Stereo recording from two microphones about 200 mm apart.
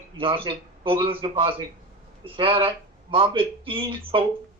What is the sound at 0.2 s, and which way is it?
Speech, 25° right (ahead or behind).